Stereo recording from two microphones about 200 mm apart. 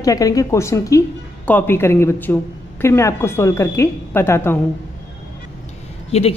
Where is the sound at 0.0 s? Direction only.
15° left (ahead or behind).